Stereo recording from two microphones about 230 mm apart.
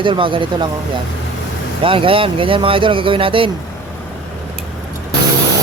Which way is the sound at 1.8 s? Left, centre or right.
Right.